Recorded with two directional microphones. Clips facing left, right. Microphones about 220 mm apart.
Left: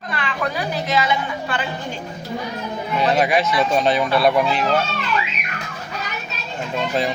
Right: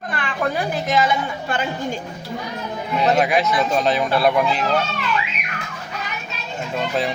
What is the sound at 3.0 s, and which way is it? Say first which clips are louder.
Speech: even; centre (ahead or behind).